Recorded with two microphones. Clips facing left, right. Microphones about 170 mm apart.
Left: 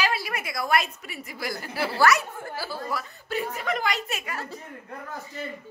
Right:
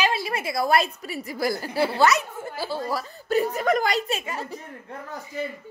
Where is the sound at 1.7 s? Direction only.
25° right (ahead or behind).